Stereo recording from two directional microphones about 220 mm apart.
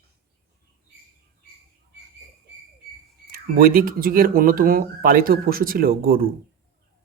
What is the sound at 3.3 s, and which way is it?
Speech, 40° right (ahead or behind).